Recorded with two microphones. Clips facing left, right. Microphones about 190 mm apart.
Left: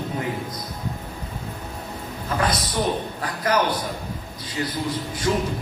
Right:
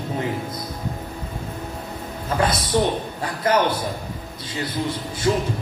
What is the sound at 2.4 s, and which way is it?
A man's voice, 25° right (ahead or behind).